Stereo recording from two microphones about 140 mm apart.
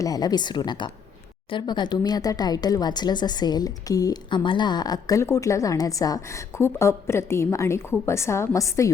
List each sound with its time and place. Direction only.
0.0 s a woman's voice: 25° left (ahead or behind)